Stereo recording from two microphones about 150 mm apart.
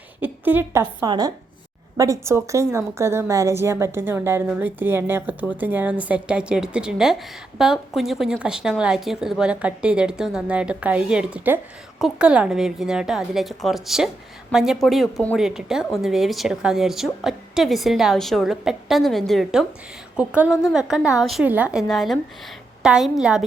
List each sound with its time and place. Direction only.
0.2 s a woman's voice: 15° right (ahead or behind)
1.0 s a woman's voice: 25° right (ahead or behind); by 23.5 s 5° right (ahead or behind)